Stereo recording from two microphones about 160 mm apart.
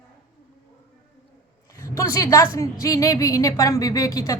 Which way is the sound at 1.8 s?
20° left (ahead or behind).